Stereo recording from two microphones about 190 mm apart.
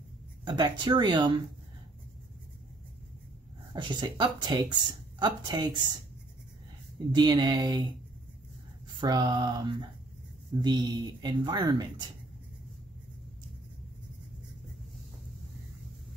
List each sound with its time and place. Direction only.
0.6 s speech: 20° right (ahead or behind)
3.7 s speech: 25° right (ahead or behind)
7.2 s speech: 20° right (ahead or behind)
9.0 s speech: 20° right (ahead or behind)